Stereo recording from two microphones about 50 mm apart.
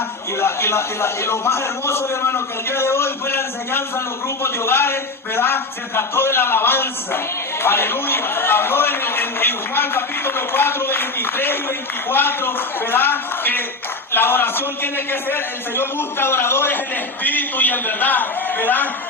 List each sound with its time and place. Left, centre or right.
0.3 s a man's voice: left
17.2 s a man's voice: left